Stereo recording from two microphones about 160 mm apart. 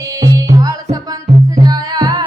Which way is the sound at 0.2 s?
25° right (ahead or behind).